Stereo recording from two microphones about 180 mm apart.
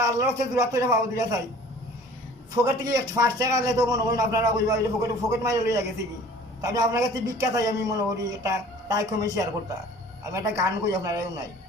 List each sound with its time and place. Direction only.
0.0 s a man's voice: 15° right (ahead or behind)
2.6 s a man's voice: 20° right (ahead or behind)